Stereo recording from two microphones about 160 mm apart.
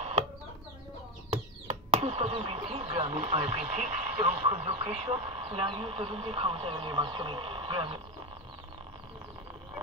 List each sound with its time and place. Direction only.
1.9 s speech: 40° right (ahead or behind)
5.0 s speech: 35° right (ahead or behind)